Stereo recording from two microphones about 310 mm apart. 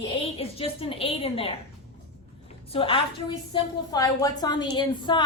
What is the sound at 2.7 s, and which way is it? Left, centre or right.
A woman's voice, centre.